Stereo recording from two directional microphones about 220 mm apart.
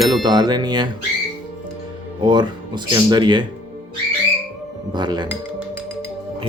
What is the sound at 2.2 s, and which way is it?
A man's voice, 20° right (ahead or behind).